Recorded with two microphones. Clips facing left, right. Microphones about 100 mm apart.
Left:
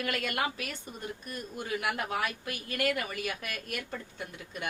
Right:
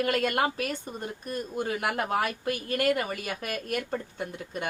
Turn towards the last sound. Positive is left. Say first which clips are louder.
# right 5 dB
turn(degrees=-40)  # may be behind; listen again after turning